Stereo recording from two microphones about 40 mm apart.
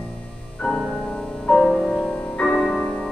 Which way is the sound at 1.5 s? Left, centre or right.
Left.